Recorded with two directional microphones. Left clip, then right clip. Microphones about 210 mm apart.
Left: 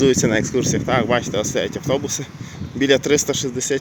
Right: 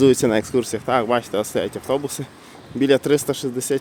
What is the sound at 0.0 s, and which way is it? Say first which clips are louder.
Speech: right 1 dB; 15° right (ahead or behind).